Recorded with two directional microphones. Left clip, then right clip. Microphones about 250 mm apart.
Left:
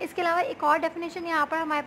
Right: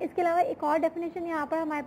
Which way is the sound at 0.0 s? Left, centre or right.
Centre.